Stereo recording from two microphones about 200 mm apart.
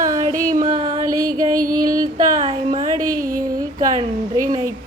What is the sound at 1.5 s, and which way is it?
Female singing, 45° right (ahead or behind).